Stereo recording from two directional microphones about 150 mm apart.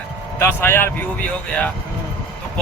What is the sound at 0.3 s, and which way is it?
Speech, 15° left (ahead or behind).